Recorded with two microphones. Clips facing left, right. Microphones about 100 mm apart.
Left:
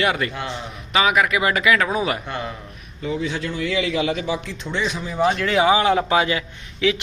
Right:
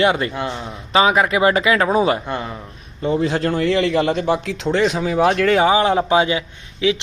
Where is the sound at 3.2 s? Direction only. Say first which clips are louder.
Right 7 dB; 40° right (ahead or behind).